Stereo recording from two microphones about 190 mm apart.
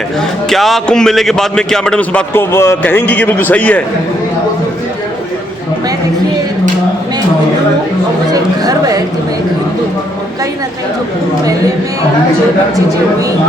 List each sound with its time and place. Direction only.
0.5 s a man's voice: centre (ahead or behind)
8.3 s speech: 20° right (ahead or behind)